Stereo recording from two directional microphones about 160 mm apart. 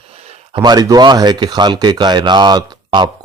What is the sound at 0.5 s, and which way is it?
Speech, 25° right (ahead or behind).